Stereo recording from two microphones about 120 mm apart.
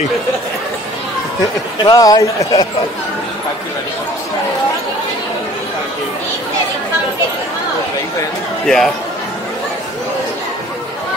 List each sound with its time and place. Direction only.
1.9 s speech: 30° left (ahead or behind)
8.6 s speech: centre (ahead or behind)